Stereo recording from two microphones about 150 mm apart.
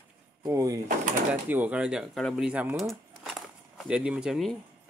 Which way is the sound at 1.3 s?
10° right (ahead or behind).